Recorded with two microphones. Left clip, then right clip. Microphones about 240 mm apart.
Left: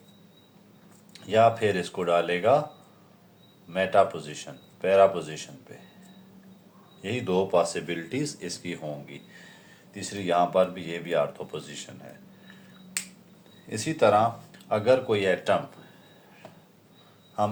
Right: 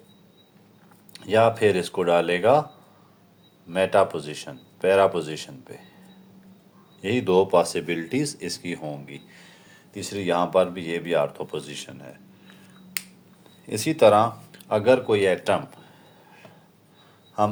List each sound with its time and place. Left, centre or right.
1.1 s speech: right
3.7 s speech: right
7.0 s speech: right
13.7 s speech: right